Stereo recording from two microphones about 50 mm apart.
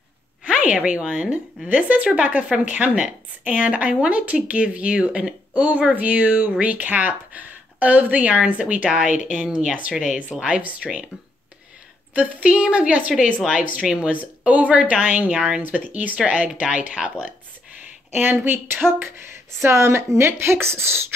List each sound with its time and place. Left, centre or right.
0.4 s a woman's voice: right
12.1 s a woman's voice: right
13.8 s speech: centre
14.1 s a woman's voice: right
15.6 s a woman's voice: right
18.1 s a woman's voice: right
19.6 s speech: right